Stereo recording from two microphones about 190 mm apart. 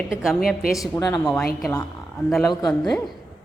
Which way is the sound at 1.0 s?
20° left (ahead or behind).